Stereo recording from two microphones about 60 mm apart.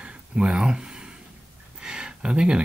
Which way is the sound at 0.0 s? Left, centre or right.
Centre.